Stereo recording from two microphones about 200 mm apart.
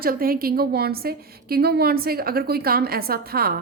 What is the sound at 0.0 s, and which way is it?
A woman's voice, 45° right (ahead or behind).